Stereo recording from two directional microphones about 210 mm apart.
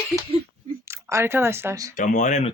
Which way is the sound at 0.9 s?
10° right (ahead or behind).